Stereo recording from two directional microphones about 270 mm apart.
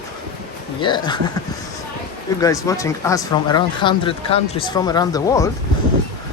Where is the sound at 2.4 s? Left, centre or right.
Centre.